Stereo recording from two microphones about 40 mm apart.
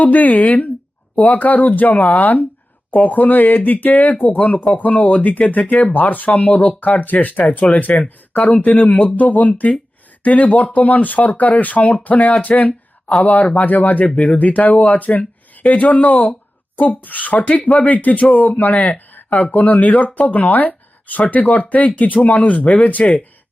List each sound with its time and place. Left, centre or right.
0.0 s speech: left